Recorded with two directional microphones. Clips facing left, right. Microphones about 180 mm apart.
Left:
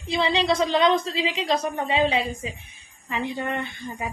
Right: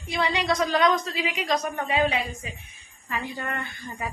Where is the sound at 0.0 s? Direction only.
30° left (ahead or behind).